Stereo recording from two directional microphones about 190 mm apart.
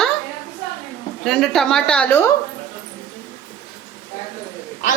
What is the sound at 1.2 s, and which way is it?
A woman's voice, centre (ahead or behind).